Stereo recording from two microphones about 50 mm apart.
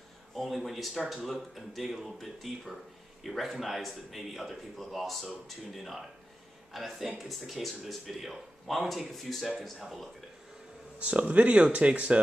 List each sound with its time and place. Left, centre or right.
0.4 s a man's voice: centre
11.0 s speech: right